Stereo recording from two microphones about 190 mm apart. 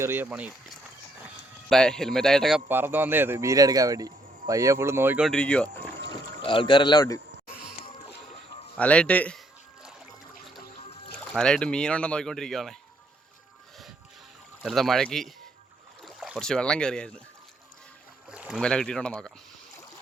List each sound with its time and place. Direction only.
0.0 s a man's voice: 10° right (ahead or behind); by 5.7 s 5° left (ahead or behind)
6.1 s speech: 25° left (ahead or behind)
8.8 s speech: 5° left (ahead or behind)
10.8 s music: 30° left (ahead or behind)
11.3 s speech: 5° left (ahead or behind)
14.6 s speech: centre (ahead or behind)
18.3 s boat: 5° right (ahead or behind)
18.6 s speech: 5° left (ahead or behind)